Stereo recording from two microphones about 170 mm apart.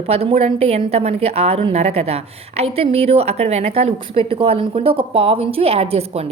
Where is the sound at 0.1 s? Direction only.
35° right (ahead or behind).